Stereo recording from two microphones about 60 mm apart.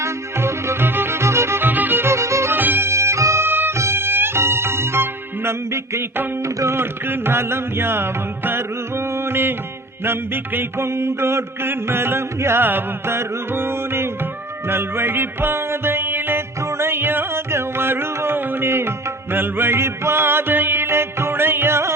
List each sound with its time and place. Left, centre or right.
0.0 s music: right
1.6 s music: right
2.0 s music: right
2.5 s music: right
2.9 s bagpipes: right
3.4 s music: right